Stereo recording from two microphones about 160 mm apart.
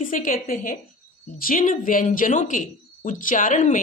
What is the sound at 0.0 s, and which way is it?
A woman's voice, 60° left (ahead or behind).